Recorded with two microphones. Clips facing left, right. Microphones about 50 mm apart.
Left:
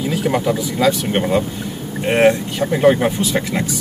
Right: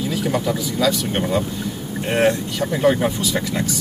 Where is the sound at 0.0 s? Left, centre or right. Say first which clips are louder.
Left 3 dB; left.